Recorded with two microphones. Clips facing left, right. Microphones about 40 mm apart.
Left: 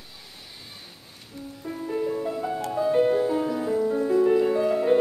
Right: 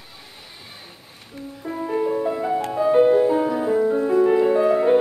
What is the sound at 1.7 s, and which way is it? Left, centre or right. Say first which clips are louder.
Music: right 5 dB; right.